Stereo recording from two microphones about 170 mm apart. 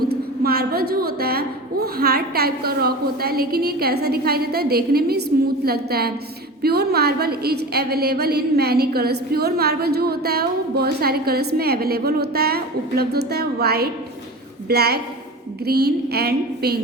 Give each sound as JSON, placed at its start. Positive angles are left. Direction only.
{"t": 0.1, "sound": "a woman's voice", "side_deg": -65}